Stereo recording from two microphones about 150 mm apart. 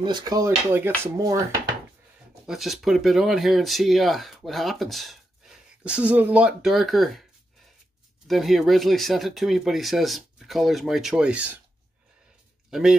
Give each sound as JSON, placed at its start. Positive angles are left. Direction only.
{"t": 0.0, "sound": "speech", "side_deg": -30}
{"t": 0.7, "sound": "speech", "side_deg": -15}
{"t": 2.4, "sound": "speech", "side_deg": 0}
{"t": 8.3, "sound": "speech", "side_deg": 0}